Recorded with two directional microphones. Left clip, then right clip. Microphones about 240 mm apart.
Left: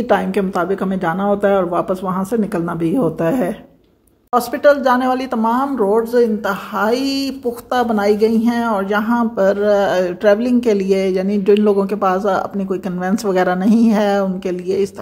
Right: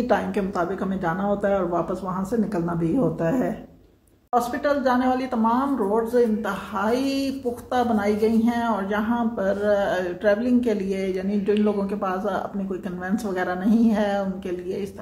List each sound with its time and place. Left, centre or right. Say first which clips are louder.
0.1 s a woman's voice: left 9 dB; left